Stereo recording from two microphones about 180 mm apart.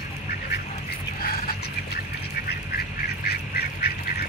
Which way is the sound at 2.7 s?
60° left (ahead or behind).